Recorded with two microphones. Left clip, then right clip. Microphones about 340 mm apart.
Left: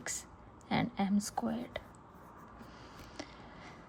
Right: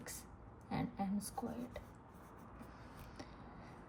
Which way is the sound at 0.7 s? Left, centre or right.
Left.